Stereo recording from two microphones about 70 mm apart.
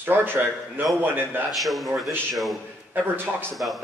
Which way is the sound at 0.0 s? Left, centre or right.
Right.